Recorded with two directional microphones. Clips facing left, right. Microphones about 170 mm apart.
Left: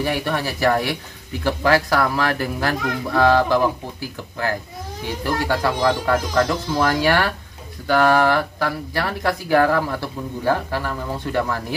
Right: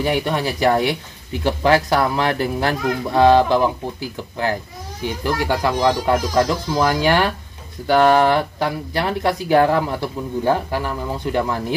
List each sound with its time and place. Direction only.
0.0 s speech: 20° right (ahead or behind)
5.2 s speech: 20° right (ahead or behind)